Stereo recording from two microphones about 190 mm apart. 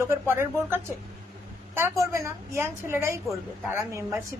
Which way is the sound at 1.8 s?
15° right (ahead or behind).